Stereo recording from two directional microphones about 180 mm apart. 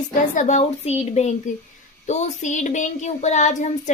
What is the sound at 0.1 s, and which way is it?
Child singing, 45° left (ahead or behind).